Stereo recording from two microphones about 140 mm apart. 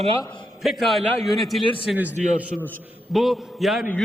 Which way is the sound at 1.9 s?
10° right (ahead or behind).